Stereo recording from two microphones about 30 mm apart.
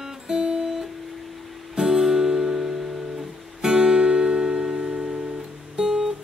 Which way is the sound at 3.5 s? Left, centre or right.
Right.